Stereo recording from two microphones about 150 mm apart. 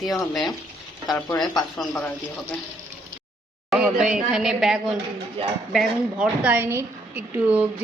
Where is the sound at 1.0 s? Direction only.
25° left (ahead or behind).